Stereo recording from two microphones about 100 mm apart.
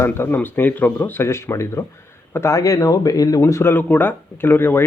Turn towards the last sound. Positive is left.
turn(degrees=20)  # may be behind; listen again after turning